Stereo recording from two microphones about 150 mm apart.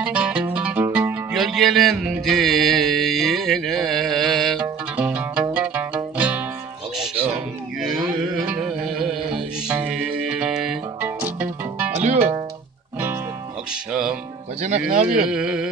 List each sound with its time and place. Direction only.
0.0 s music: 10° right (ahead or behind)
8.5 s music: 5° right (ahead or behind)
11.9 s music: 50° right (ahead or behind)
14.9 s speech: 50° right (ahead or behind)
15.2 s music: 5° right (ahead or behind)